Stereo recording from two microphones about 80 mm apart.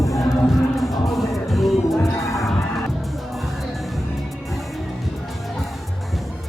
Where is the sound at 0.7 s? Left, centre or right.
Centre.